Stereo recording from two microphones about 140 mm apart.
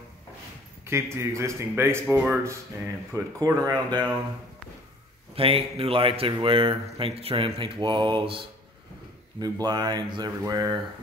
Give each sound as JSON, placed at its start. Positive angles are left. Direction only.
{"t": 0.8, "sound": "speech", "side_deg": -20}
{"t": 3.1, "sound": "speech", "side_deg": -25}
{"t": 5.3, "sound": "a man's voice", "side_deg": -40}